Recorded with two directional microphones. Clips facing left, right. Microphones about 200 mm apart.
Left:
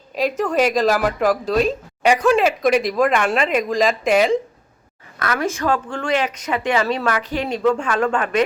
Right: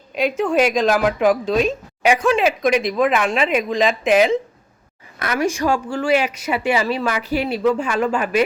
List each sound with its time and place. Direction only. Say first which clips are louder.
0.2 s speech: right 1 dB; centre (ahead or behind)
5.2 s speech: right 2 dB; 15° right (ahead or behind)